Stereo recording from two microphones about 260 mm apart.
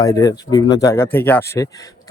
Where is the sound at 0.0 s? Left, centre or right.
Centre.